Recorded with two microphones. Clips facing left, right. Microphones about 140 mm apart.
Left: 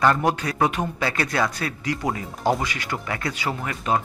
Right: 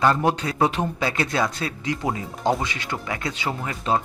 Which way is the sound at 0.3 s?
25° right (ahead or behind).